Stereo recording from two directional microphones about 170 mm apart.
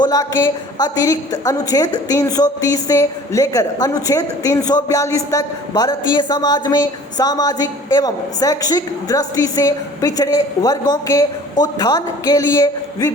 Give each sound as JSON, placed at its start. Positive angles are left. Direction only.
{"t": 0.0, "sound": "a woman's voice", "side_deg": 20}